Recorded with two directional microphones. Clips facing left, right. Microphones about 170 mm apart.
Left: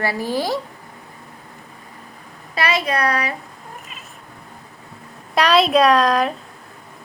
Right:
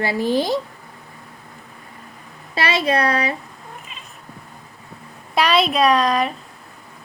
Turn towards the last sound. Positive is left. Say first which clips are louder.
# left 1 dB
turn(degrees=0)  # may be behind; listen again after turning